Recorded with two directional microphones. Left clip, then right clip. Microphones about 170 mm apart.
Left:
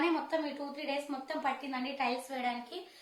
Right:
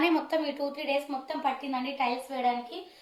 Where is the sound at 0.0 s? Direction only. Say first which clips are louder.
Right 5 dB; 45° right (ahead or behind).